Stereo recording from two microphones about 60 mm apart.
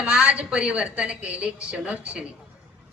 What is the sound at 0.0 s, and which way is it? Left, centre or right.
A woman's voice, centre.